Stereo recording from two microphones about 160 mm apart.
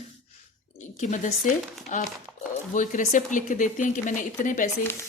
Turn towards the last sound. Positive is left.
turn(degrees=55)  # may be behind; listen again after turning